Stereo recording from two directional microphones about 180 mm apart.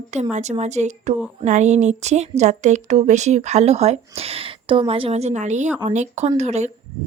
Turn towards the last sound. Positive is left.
turn(degrees=-40)  # may be behind; listen again after turning